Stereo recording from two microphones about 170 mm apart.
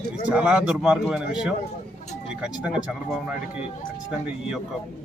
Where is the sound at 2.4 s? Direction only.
5° right (ahead or behind).